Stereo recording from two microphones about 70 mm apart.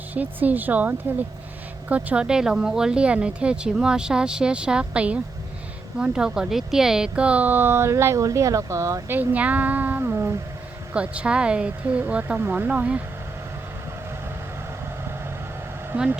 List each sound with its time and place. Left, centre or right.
0.1 s speech: right
8.2 s speech: right
9.0 s speech: right
10.9 s speech: centre
15.9 s speech: right